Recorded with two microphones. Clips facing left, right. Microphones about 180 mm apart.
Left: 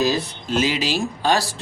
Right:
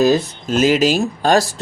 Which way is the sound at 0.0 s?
50° right (ahead or behind).